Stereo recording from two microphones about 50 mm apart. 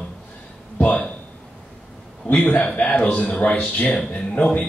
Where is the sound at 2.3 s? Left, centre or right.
Left.